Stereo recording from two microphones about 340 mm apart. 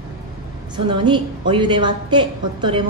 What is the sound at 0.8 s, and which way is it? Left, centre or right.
A woman's voice, centre.